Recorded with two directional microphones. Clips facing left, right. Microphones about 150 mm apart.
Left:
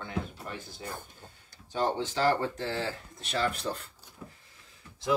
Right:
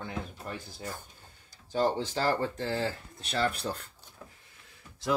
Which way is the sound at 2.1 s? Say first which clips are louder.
Left 2 dB; 40° right (ahead or behind).